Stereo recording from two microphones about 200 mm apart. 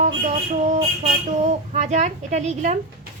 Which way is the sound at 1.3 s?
35° right (ahead or behind).